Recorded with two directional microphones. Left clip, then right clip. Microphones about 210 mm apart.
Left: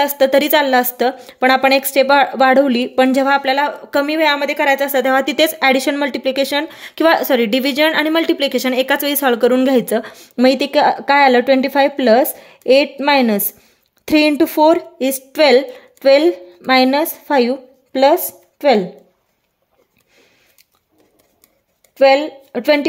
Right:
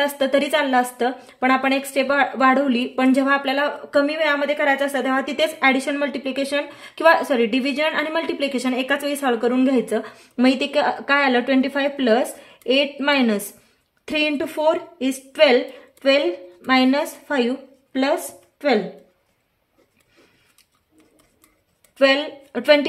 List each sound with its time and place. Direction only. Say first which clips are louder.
0.0 s a woman's voice: left 6 dB; 35° left (ahead or behind)
21.9 s speech: left 6 dB; 25° left (ahead or behind)